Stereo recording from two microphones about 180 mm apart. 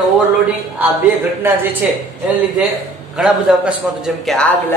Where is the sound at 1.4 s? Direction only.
10° right (ahead or behind).